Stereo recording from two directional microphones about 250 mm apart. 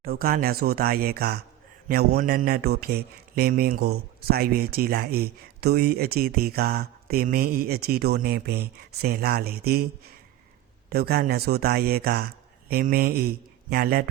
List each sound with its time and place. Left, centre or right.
0.0 s speech: right
10.8 s speech: right